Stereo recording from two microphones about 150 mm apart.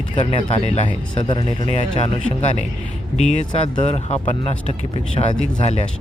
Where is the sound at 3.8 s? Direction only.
45° left (ahead or behind).